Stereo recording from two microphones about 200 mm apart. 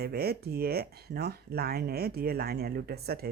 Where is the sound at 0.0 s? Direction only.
50° right (ahead or behind).